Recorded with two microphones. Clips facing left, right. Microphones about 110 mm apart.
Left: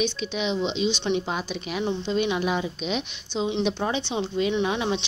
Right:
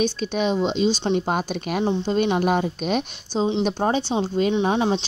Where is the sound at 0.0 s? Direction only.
45° right (ahead or behind).